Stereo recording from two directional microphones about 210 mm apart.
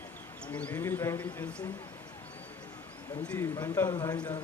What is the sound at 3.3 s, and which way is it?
A man's voice, 15° left (ahead or behind).